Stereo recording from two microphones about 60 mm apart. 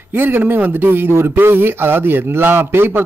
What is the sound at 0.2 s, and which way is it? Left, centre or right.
Speech, right.